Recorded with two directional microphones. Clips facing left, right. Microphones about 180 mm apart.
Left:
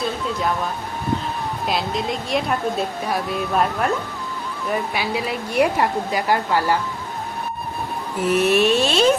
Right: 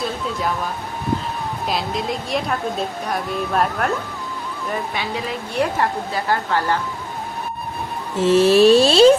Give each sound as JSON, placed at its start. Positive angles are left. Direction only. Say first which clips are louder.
{"t": 0.0, "sound": "music", "louder": "left 1 dB", "side_deg": 0}
{"t": 1.6, "sound": "a woman's voice", "louder": "even", "side_deg": 0}
{"t": 4.9, "sound": "a woman's voice", "louder": "left 2 dB", "side_deg": 10}
{"t": 8.1, "sound": "a sound", "louder": "right 4 dB", "side_deg": -25}